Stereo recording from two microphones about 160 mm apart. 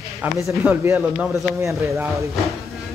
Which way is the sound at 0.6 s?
15° right (ahead or behind).